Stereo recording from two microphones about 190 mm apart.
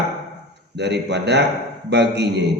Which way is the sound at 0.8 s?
65° right (ahead or behind).